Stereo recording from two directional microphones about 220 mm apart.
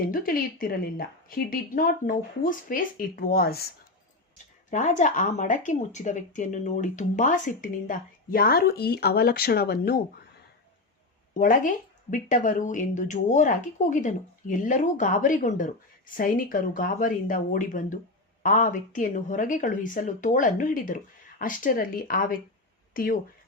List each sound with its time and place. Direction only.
0.1 s speech: 40° left (ahead or behind)
4.7 s speech: 35° left (ahead or behind)
11.3 s speech: 40° left (ahead or behind)